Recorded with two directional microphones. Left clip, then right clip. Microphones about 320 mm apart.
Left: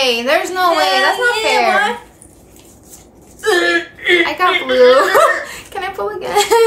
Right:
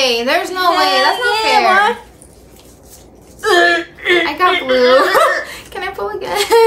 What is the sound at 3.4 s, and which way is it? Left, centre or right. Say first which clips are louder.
Speech: right 2 dB; centre.